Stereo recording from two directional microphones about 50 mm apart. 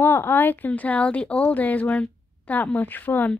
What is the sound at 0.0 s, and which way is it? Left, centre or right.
Speech, left.